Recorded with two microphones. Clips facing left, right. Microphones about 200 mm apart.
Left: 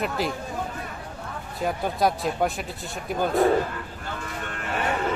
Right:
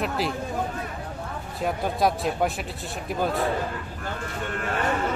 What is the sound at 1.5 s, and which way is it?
Speech, centre (ahead or behind).